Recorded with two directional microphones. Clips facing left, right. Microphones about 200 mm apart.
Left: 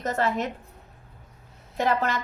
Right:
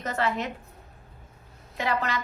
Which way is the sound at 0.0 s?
45° left (ahead or behind).